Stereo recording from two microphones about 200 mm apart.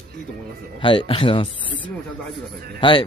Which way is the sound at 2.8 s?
25° left (ahead or behind).